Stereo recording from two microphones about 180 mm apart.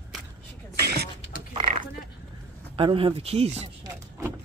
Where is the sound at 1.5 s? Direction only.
25° right (ahead or behind).